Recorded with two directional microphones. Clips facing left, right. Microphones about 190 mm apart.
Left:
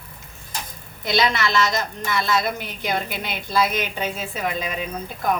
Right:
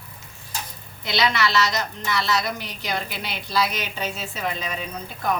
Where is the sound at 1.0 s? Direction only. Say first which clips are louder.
Left 2 dB; 45° left (ahead or behind).